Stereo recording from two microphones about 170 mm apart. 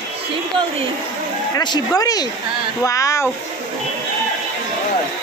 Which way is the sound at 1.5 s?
25° left (ahead or behind).